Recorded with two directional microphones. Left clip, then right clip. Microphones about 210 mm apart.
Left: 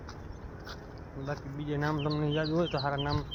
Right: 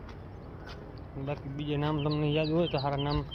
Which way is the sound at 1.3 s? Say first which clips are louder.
Right 1 dB; 10° right (ahead or behind).